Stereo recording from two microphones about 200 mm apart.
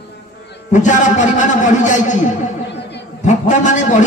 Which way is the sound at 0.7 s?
40° left (ahead or behind).